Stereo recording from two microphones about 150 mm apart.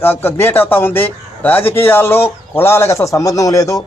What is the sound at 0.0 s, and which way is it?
A man's voice, 15° left (ahead or behind).